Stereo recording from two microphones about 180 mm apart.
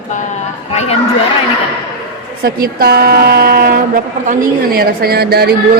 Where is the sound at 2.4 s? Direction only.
55° right (ahead or behind).